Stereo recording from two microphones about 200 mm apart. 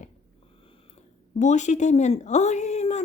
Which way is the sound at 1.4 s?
35° left (ahead or behind).